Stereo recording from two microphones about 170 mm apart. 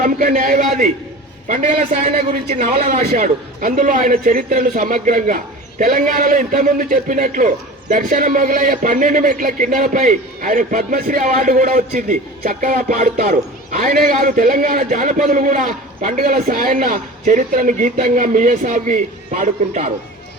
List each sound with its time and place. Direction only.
0.0 s a man's voice: 50° right (ahead or behind)
3.1 s a man's voice: 50° right (ahead or behind)